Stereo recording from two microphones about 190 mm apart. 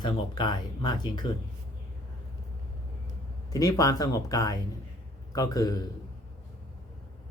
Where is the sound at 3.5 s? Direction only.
20° left (ahead or behind).